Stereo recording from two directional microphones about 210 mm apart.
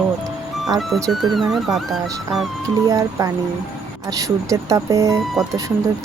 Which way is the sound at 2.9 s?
15° right (ahead or behind).